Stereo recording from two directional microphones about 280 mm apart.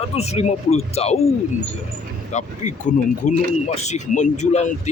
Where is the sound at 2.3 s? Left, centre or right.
Left.